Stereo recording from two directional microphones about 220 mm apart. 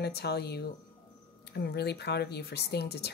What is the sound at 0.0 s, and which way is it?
Speech, 45° left (ahead or behind).